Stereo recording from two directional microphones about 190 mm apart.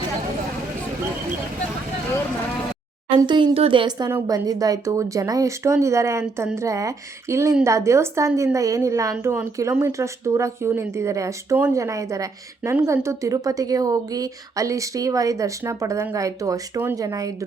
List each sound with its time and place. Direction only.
3.2 s a woman's voice: 25° right (ahead or behind)